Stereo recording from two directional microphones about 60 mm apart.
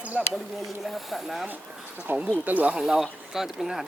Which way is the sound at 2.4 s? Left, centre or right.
Right.